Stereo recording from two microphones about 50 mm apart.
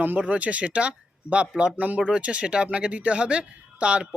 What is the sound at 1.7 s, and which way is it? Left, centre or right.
Speech, right.